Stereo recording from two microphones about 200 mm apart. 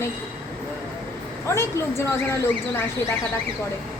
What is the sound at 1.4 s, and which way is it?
A woman's voice, 15° left (ahead or behind).